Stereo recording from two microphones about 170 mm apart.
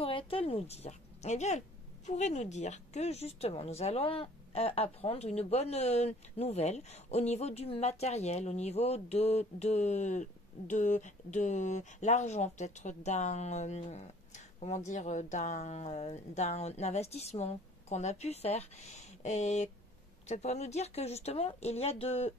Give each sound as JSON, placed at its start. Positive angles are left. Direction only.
{"t": 0.0, "sound": "a woman's voice", "side_deg": 35}